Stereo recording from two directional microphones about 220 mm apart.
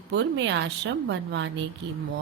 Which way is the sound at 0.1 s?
55° right (ahead or behind).